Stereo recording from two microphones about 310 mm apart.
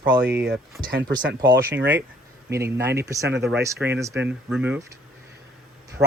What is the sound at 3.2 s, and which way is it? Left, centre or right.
Speech, right.